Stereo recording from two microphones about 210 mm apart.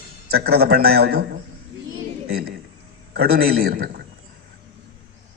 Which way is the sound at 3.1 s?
45° right (ahead or behind).